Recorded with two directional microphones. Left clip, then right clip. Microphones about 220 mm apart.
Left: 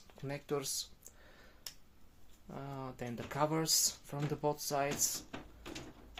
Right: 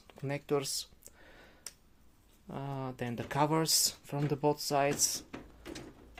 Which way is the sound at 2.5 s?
35° right (ahead or behind).